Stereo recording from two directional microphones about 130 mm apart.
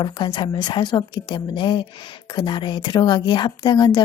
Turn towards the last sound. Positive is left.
turn(degrees=35)  # may be behind; listen again after turning